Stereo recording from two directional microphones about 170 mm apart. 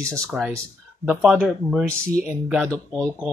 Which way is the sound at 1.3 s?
Centre (ahead or behind).